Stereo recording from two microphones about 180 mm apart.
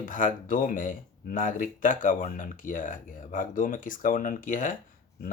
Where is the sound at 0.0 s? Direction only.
45° left (ahead or behind).